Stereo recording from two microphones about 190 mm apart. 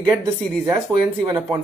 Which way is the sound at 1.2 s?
15° right (ahead or behind).